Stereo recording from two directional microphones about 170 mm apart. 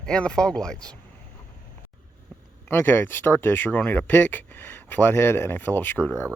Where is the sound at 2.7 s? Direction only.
15° left (ahead or behind).